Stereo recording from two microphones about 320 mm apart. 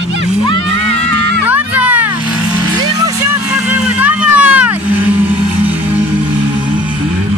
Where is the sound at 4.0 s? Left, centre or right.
Centre.